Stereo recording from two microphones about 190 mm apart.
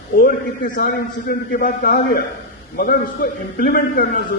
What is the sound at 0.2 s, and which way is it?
A man's voice, 55° left (ahead or behind).